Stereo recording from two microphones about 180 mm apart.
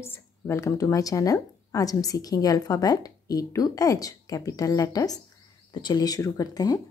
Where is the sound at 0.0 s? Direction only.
15° left (ahead or behind).